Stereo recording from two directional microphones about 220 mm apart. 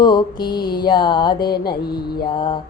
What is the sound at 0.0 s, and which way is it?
Music, 20° left (ahead or behind).